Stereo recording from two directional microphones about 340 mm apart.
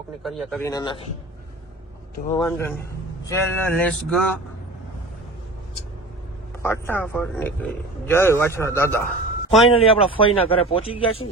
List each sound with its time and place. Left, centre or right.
0.2 s a man's voice: centre
2.2 s a man's voice: centre
6.6 s a man's voice: centre
9.7 s a man's voice: centre